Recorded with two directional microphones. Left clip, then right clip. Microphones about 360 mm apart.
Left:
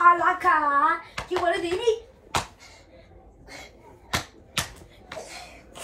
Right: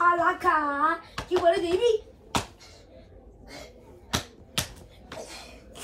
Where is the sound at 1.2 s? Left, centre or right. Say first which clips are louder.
Left 2 dB; centre.